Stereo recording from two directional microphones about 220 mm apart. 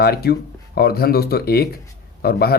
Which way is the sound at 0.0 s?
45° left (ahead or behind).